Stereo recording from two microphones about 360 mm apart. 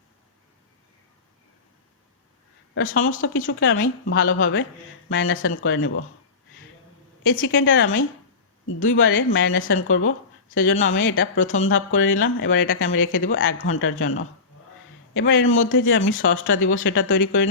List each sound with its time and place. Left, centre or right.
2.7 s a woman's voice: left
7.3 s a woman's voice: left